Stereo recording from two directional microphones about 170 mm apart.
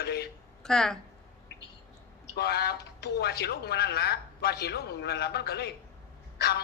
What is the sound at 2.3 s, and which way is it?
Speech, 70° left (ahead or behind).